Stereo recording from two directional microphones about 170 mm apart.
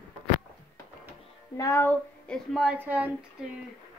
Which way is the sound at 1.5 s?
15° left (ahead or behind).